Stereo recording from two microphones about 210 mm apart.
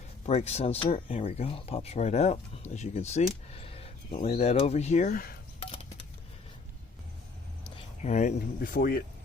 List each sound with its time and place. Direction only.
0.3 s speech: 30° left (ahead or behind)
8.0 s speech: 35° left (ahead or behind)